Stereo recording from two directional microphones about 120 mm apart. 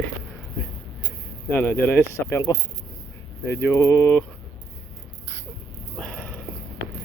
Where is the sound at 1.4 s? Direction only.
15° left (ahead or behind).